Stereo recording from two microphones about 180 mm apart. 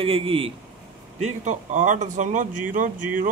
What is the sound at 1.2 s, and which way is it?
A man's voice, 40° right (ahead or behind).